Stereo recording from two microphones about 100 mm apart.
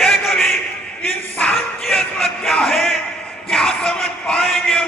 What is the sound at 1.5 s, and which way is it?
Music, centre (ahead or behind).